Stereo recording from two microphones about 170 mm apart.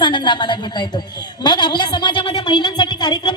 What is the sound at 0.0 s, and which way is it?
A woman's voice, 25° left (ahead or behind).